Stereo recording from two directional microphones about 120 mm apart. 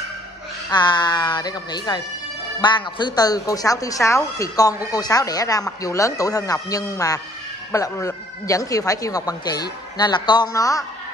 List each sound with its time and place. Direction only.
0.7 s speech: 35° left (ahead or behind)